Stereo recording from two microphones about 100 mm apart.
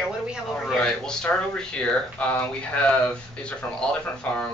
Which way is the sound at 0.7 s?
5° left (ahead or behind).